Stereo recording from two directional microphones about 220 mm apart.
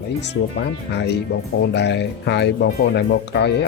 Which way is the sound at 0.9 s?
50° left (ahead or behind).